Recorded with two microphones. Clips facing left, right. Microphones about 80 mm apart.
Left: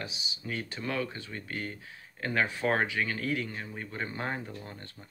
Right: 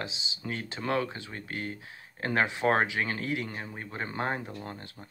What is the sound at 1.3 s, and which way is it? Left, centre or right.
Speech, right.